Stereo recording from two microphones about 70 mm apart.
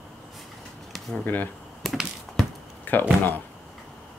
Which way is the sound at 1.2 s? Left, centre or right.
Left.